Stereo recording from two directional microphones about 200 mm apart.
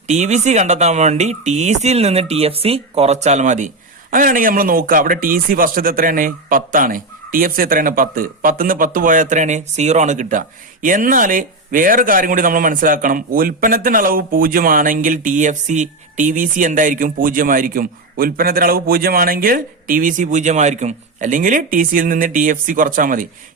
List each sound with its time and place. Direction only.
0.1 s a man's voice: 35° right (ahead or behind)